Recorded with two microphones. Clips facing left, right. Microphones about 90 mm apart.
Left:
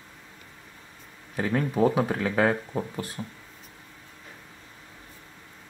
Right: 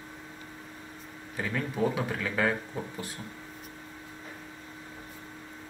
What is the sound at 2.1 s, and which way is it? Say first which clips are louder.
Speech: left 5 dB; 30° left (ahead or behind).